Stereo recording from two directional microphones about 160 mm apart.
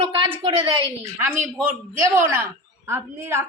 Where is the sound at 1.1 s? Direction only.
15° right (ahead or behind).